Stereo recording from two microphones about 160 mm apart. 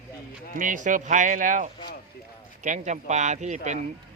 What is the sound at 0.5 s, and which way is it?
Speech, 55° right (ahead or behind).